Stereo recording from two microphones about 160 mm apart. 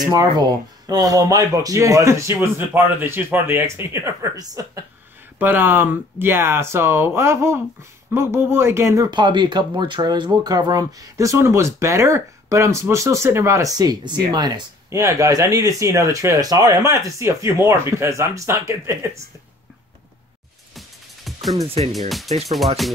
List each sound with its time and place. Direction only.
0.0 s speech: 25° right (ahead or behind)
20.7 s music: centre (ahead or behind)
21.6 s speech: 40° right (ahead or behind)